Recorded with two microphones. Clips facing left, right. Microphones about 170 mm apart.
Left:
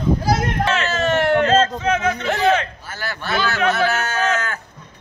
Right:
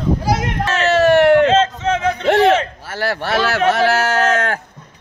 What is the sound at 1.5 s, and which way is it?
Speech, 25° right (ahead or behind).